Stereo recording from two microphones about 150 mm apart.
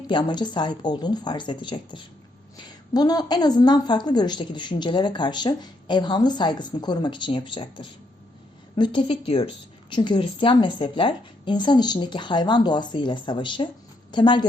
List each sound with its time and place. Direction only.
0.1 s a woman's voice: 30° left (ahead or behind)